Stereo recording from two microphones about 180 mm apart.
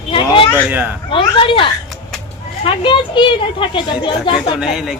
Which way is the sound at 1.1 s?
30° left (ahead or behind).